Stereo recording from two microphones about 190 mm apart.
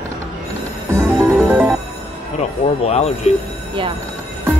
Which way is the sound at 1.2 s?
10° right (ahead or behind).